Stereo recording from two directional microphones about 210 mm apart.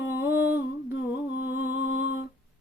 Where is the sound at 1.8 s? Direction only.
55° left (ahead or behind).